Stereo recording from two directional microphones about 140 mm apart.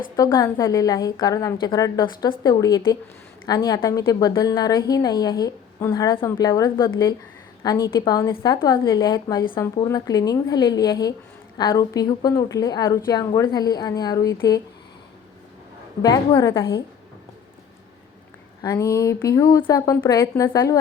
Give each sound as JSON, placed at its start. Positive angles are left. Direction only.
{"t": 0.2, "sound": "a woman's voice", "side_deg": 25}
{"t": 16.0, "sound": "a woman's voice", "side_deg": 25}
{"t": 18.6, "sound": "a woman's voice", "side_deg": 25}